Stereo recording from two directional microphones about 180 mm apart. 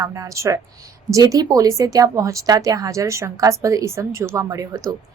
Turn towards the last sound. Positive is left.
turn(degrees=-20)  # may be behind; listen again after turning